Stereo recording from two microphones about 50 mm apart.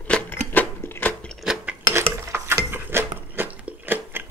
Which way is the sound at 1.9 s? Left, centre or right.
Right.